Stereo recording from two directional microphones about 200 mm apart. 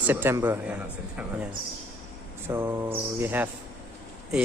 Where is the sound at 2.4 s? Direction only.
10° right (ahead or behind).